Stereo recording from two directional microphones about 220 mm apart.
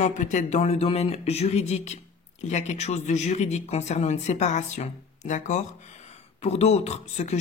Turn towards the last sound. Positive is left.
turn(degrees=30)  # may be behind; listen again after turning